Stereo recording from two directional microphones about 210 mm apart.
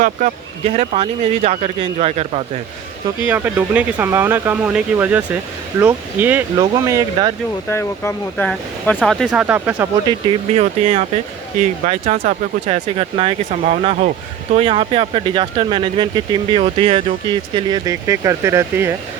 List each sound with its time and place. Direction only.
0.0 s speech: 35° right (ahead or behind)
3.2 s speech: 10° right (ahead or behind)
7.7 s speech: 10° left (ahead or behind); by 9.9 s 10° right (ahead or behind)
10.1 s speech: 25° right (ahead or behind)